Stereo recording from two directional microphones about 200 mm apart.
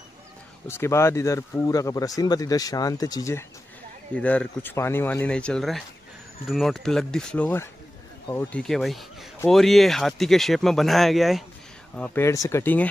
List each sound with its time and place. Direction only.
0.7 s speech: 15° left (ahead or behind)
4.1 s speech: 5° left (ahead or behind)